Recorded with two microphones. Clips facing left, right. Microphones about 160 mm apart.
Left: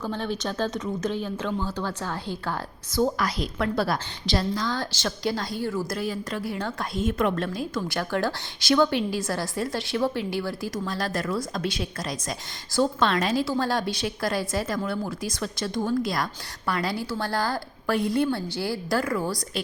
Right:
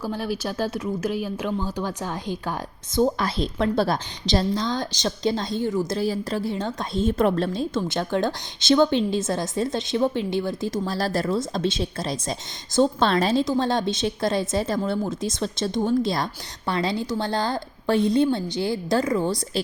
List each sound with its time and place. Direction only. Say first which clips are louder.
0.0 s a woman's voice: right 2 dB; 10° right (ahead or behind)
6.0 s a woman's voice: right 5 dB; 30° right (ahead or behind)
13.4 s a woman's voice: right 3 dB; 20° right (ahead or behind)